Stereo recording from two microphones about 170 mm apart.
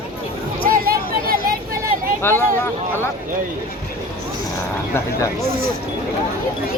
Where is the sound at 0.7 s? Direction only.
60° right (ahead or behind).